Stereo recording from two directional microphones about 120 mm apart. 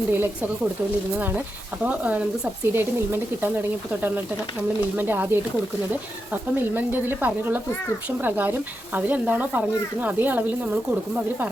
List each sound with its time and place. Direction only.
0.1 s speech: 15° right (ahead or behind)
1.8 s speech: 10° right (ahead or behind)
4.9 s speech: 15° right (ahead or behind)